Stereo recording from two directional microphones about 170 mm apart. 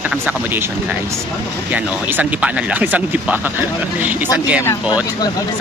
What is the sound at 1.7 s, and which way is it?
Speech, 10° right (ahead or behind).